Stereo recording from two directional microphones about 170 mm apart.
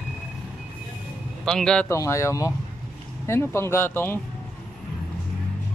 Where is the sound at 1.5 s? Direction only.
5° left (ahead or behind).